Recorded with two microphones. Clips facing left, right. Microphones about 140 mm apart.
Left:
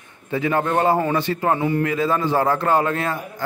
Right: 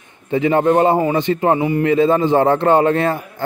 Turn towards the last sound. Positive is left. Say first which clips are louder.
# right 6 dB
turn(degrees=-30)  # may be behind; listen again after turning